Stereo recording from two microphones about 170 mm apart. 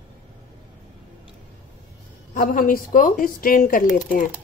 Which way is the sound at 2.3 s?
55° left (ahead or behind).